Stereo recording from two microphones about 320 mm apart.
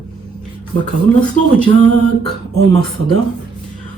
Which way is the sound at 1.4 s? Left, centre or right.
Left.